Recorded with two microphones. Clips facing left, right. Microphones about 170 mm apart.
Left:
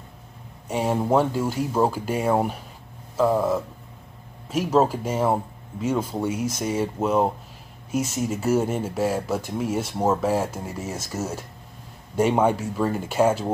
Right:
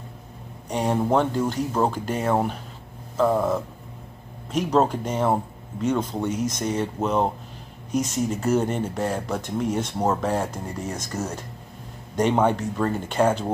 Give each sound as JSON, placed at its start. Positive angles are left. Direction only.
{"t": 0.7, "sound": "speech", "side_deg": 5}